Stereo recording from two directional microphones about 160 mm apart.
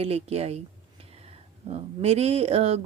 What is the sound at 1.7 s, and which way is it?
Speech, 40° right (ahead or behind).